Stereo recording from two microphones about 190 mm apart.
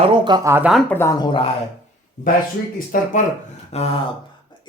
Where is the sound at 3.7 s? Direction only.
35° left (ahead or behind).